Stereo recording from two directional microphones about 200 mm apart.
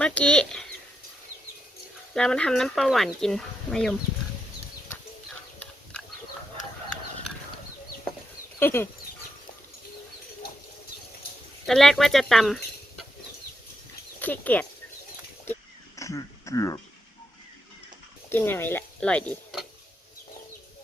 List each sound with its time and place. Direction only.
0.0 s speech: 5° left (ahead or behind)
2.1 s speech: 5° left (ahead or behind)
8.5 s speech: 10° left (ahead or behind)
11.6 s speech: centre (ahead or behind)
14.2 s speech: 10° left (ahead or behind)
16.0 s throat clearing: 15° left (ahead or behind)
18.3 s speech: 10° left (ahead or behind)